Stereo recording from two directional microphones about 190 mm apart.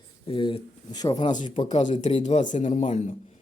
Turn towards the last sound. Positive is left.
turn(degrees=40)  # may be behind; listen again after turning